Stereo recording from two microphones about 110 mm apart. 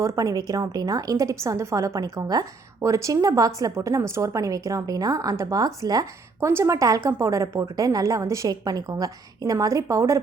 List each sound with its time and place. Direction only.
0.0 s a woman's voice: 30° right (ahead or behind)